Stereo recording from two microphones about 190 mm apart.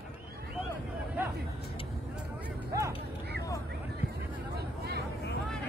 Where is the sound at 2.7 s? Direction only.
15° right (ahead or behind).